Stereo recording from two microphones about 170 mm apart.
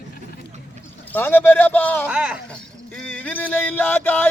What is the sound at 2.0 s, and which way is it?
Speech, 5° right (ahead or behind).